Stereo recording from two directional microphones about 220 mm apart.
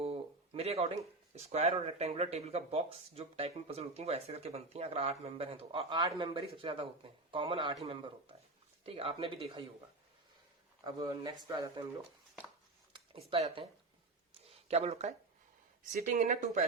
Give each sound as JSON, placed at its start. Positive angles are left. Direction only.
{"t": 0.0, "sound": "a sound", "side_deg": -25}
{"t": 1.4, "sound": "speech", "side_deg": -30}
{"t": 10.8, "sound": "speech", "side_deg": -20}
{"t": 13.3, "sound": "speech", "side_deg": -25}
{"t": 14.4, "sound": "a sound", "side_deg": -30}
{"t": 15.9, "sound": "speech", "side_deg": -35}